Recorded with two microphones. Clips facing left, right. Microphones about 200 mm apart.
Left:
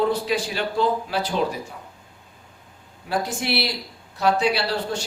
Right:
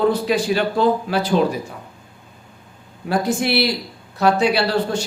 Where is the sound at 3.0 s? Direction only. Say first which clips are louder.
Right 6 dB; 55° right (ahead or behind).